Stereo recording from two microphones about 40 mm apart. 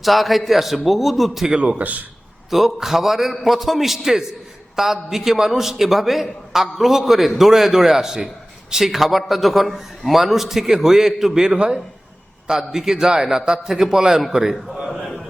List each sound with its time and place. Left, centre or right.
0.0 s a man's voice: centre
1.5 s a man's voice: right
1.8 s a man's voice: right
2.5 s a man's voice: centre